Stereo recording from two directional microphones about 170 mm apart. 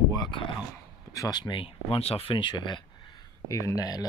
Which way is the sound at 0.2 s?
30° left (ahead or behind).